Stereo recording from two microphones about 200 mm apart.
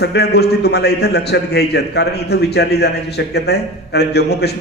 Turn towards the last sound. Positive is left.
turn(degrees=55)  # may be behind; listen again after turning